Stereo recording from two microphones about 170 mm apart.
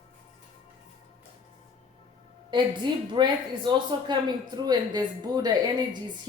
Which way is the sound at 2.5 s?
30° right (ahead or behind).